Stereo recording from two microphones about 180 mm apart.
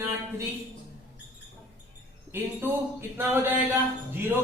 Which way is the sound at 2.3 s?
15° right (ahead or behind).